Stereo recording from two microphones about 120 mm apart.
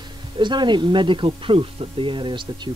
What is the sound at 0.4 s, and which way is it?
A woman's voice, 40° right (ahead or behind).